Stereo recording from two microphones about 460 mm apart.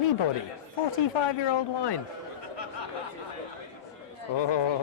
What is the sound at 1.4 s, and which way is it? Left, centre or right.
Speech, left.